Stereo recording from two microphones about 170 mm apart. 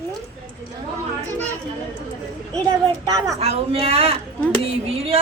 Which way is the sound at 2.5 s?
20° right (ahead or behind).